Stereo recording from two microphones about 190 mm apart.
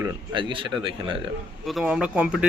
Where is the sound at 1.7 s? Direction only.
Centre (ahead or behind).